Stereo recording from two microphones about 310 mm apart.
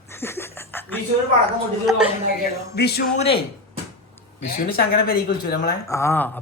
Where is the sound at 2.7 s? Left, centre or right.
Left.